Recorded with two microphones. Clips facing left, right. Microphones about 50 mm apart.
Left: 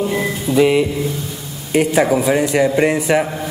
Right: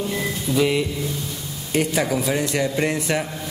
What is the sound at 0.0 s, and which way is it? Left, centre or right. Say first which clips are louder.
Mantra: left 6 dB; left.